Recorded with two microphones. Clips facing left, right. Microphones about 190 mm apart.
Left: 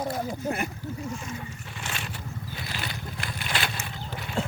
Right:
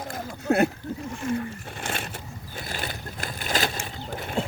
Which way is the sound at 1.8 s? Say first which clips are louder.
Right 5 dB; 55° right (ahead or behind).